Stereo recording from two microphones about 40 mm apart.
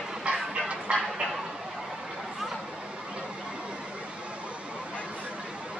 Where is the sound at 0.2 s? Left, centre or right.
Right.